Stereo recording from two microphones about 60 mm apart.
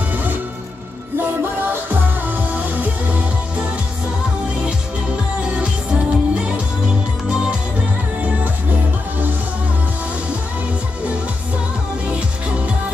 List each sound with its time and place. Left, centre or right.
0.1 s music: right
1.6 s music: right
4.6 s music: centre